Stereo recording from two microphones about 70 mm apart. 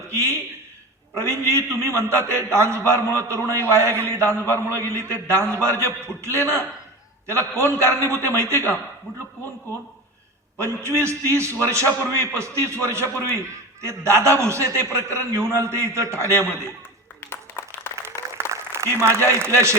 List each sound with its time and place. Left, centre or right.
0.1 s a man's voice: right
10.6 s a man's voice: right
17.2 s a sound: left
18.7 s a man's voice: right